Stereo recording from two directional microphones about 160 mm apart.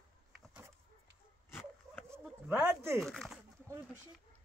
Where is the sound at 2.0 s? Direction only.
15° right (ahead or behind).